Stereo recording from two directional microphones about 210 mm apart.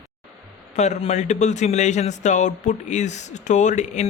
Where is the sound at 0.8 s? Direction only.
35° left (ahead or behind).